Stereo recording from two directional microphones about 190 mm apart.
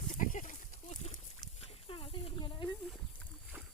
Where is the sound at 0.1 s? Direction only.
45° left (ahead or behind); by 2.6 s 25° left (ahead or behind).